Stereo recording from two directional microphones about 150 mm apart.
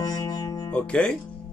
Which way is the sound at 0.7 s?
5° left (ahead or behind).